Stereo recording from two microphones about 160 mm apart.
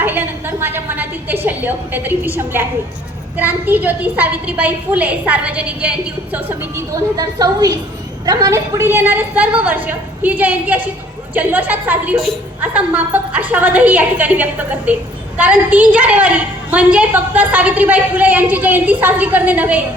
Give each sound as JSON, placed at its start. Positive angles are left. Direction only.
{"t": 0.0, "sound": "a woman's voice", "side_deg": -15}